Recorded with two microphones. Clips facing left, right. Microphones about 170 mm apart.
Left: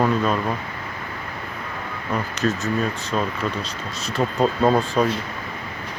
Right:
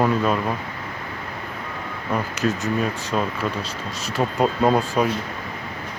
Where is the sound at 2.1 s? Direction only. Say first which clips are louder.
Even; 10° right (ahead or behind).